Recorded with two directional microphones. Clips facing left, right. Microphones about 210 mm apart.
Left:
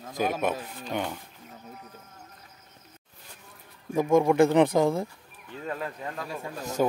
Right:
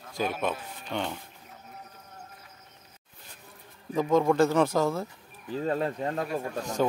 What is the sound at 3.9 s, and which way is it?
Speech, 10° left (ahead or behind).